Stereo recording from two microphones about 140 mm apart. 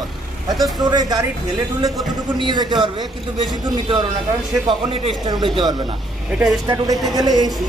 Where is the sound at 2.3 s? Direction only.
30° right (ahead or behind).